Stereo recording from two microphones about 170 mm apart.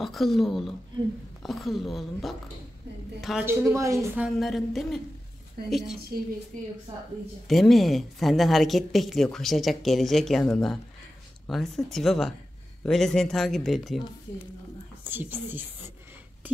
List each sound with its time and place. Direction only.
0.0 s speech: centre (ahead or behind)
3.4 s a woman's voice: 15° right (ahead or behind)
4.2 s speech: centre (ahead or behind)
7.4 s speech: centre (ahead or behind)
15.0 s a woman's voice: 10° right (ahead or behind)